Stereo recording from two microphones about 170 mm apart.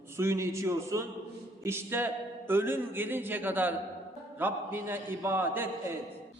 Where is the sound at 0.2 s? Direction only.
15° right (ahead or behind).